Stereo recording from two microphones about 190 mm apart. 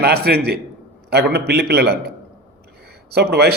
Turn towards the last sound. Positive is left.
turn(degrees=-55)  # may be behind; listen again after turning